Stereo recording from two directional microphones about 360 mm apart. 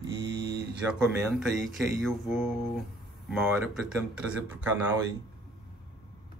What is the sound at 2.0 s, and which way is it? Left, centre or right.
Speech, centre.